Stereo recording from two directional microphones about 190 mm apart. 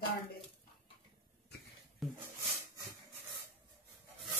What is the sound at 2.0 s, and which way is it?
Speech, centre (ahead or behind).